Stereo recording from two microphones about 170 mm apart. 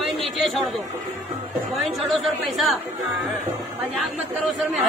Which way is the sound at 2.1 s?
Centre (ahead or behind).